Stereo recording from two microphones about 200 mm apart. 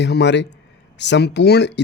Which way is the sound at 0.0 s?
60° left (ahead or behind).